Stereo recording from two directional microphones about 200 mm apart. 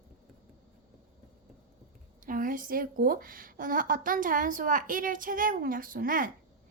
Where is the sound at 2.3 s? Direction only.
45° right (ahead or behind).